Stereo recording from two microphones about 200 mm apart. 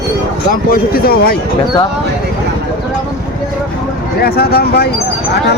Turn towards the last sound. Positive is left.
turn(degrees=50)  # may be behind; listen again after turning